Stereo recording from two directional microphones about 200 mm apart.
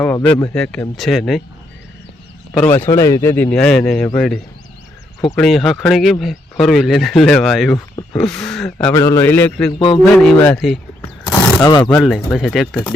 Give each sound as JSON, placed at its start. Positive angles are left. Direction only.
{"t": 0.0, "sound": "speech", "side_deg": 5}
{"t": 2.5, "sound": "speech", "side_deg": 10}
{"t": 8.9, "sound": "speech", "side_deg": 15}
{"t": 9.7, "sound": "speech", "side_deg": 25}
{"t": 10.0, "sound": "speech", "side_deg": 5}
{"t": 11.3, "sound": "a sound", "side_deg": 20}
{"t": 11.8, "sound": "speech", "side_deg": 5}